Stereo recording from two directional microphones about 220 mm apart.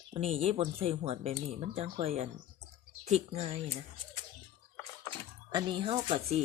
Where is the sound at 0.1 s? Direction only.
25° right (ahead or behind).